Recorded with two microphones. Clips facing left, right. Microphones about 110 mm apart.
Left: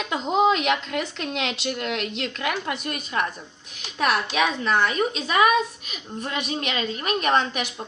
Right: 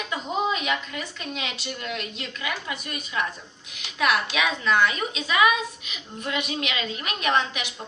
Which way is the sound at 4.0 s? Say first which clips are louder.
Left 2 dB; 40° left (ahead or behind).